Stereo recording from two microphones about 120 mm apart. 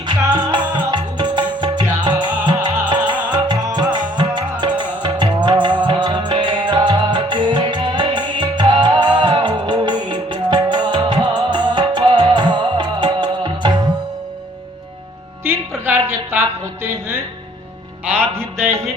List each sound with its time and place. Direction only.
0.1 s music: 40° right (ahead or behind)
15.4 s music: 20° right (ahead or behind)
15.9 s a sound: 20° right (ahead or behind)
18.5 s music: 20° right (ahead or behind)